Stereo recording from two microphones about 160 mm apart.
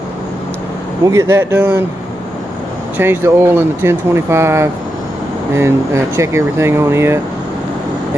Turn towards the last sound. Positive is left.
turn(degrees=-15)  # may be behind; listen again after turning